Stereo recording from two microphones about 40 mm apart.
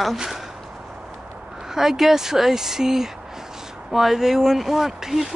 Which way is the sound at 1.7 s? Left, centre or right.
Centre.